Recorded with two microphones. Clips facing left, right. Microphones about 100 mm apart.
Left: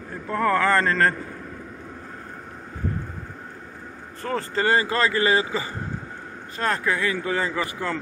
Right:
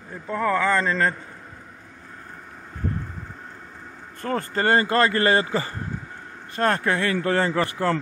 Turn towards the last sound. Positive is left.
turn(degrees=-60)  # may be behind; listen again after turning